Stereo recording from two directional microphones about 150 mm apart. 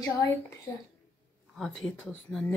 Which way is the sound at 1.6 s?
5° left (ahead or behind).